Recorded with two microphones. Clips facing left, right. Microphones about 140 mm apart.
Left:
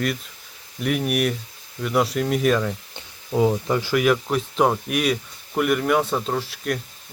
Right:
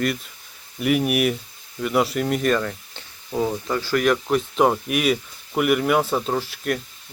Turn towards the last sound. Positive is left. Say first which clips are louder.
# right 1 dB
turn(degrees=0)  # may be behind; listen again after turning